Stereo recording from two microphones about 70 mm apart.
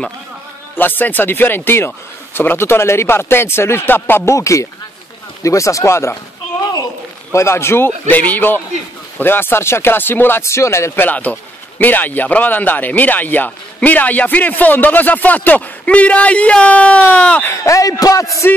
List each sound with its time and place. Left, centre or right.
0.7 s speech: left
4.4 s speech: left
7.3 s speech: left
10.4 s speech: left
11.1 s speech: left
17.5 s speech: left